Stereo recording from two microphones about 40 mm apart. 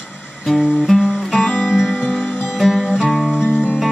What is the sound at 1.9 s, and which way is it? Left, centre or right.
Music, left.